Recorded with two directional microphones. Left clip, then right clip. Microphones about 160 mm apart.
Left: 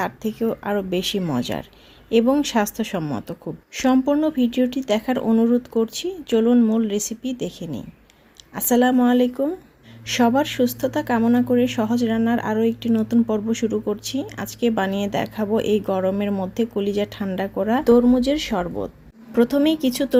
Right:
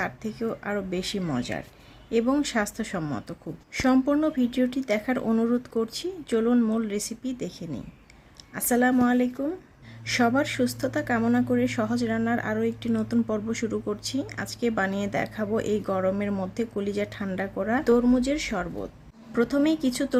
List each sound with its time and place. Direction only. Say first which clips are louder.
0.0 s speech: left 6 dB; 20° left (ahead or behind)